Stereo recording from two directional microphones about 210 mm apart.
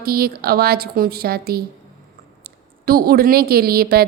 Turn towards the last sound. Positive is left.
turn(degrees=-45)  # may be behind; listen again after turning